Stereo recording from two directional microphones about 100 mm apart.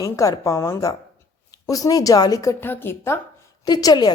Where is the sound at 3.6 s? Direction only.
40° left (ahead or behind).